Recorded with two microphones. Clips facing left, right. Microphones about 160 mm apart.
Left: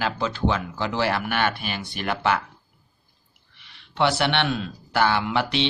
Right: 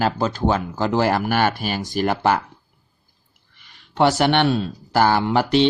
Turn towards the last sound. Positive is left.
turn(degrees=-40)  # may be behind; listen again after turning